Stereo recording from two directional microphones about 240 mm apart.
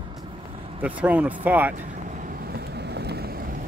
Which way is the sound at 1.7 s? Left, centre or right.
Right.